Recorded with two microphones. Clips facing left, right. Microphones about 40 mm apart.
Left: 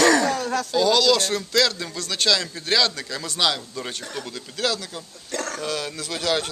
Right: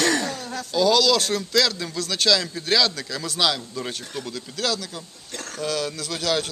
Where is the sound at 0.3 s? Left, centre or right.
Left.